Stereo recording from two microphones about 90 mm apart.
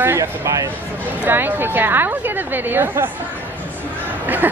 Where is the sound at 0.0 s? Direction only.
35° right (ahead or behind).